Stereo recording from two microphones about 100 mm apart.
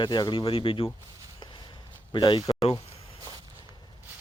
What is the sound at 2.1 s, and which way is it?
Speech, 50° left (ahead or behind).